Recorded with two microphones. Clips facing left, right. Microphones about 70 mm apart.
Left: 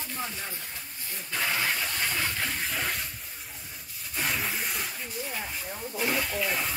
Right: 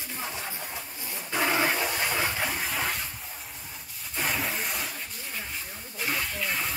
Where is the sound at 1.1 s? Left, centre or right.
Centre.